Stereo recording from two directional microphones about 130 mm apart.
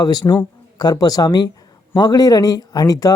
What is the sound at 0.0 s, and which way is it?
Speech, 30° left (ahead or behind).